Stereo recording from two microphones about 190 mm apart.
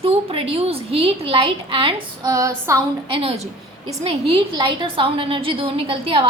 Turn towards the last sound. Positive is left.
turn(degrees=-30)  # may be behind; listen again after turning